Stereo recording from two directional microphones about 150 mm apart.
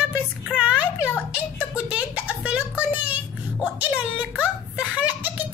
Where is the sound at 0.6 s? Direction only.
10° right (ahead or behind).